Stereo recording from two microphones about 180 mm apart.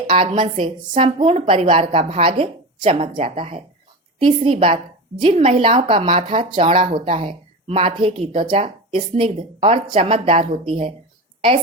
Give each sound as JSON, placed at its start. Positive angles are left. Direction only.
{"t": 0.1, "sound": "a woman's voice", "side_deg": -30}